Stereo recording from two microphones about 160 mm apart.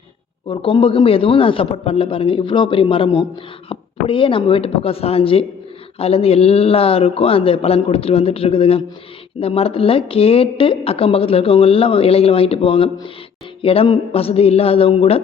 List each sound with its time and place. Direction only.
0.4 s speech: 35° left (ahead or behind)